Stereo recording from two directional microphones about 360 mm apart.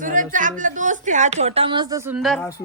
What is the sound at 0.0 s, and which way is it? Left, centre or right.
A woman's voice, right.